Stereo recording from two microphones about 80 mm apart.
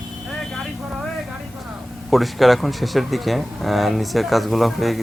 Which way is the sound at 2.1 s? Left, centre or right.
Centre.